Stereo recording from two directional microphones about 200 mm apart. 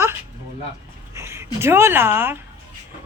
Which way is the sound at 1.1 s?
15° right (ahead or behind).